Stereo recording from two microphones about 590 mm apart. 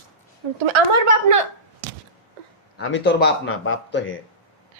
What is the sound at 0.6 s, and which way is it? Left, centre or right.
Speech, right.